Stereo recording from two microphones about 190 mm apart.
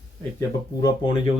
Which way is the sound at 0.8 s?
20° left (ahead or behind).